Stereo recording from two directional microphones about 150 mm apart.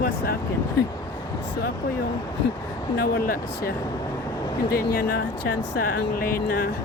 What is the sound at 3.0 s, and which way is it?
Speech, 75° left (ahead or behind).